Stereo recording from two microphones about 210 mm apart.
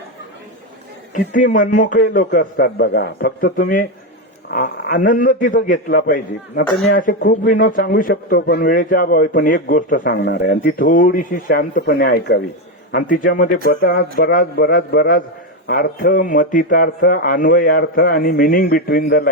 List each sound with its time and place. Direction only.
1.1 s a man's voice: 40° left (ahead or behind)